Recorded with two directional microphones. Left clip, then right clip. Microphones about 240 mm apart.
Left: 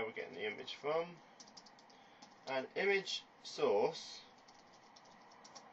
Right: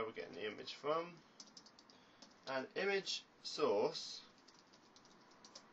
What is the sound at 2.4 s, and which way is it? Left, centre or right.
Speech, centre.